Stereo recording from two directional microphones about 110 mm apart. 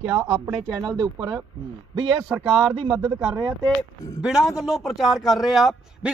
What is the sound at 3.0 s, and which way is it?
Speech, 40° right (ahead or behind).